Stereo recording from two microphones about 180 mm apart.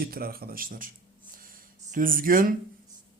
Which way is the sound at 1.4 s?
50° right (ahead or behind).